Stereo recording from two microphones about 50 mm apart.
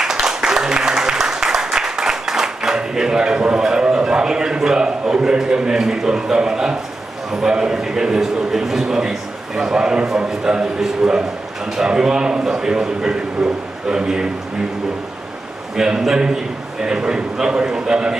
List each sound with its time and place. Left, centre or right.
0.0 s applause: centre
7.3 s a man's voice: centre
15.7 s a man's voice: centre